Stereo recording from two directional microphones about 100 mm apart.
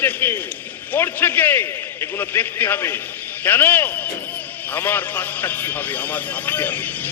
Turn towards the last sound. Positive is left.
turn(degrees=20)  # may be behind; listen again after turning